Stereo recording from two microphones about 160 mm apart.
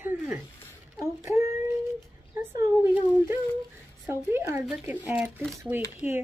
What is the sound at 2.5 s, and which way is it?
Speech, 15° right (ahead or behind).